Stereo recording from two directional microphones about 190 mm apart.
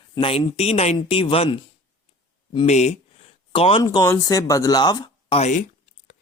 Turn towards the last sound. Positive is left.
turn(degrees=35)  # may be behind; listen again after turning